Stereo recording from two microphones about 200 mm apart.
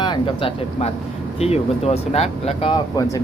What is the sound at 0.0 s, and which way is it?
Speech, 25° left (ahead or behind).